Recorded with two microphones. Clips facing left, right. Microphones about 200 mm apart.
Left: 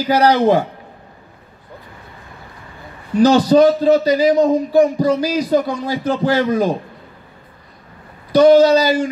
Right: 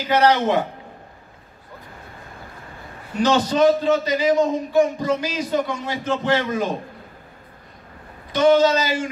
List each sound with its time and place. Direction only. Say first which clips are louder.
0.1 s a man's voice: left 4 dB; 35° left (ahead or behind)
3.2 s a man's voice: left 7 dB; 35° left (ahead or behind)
8.3 s a man's voice: left 6 dB; 35° left (ahead or behind)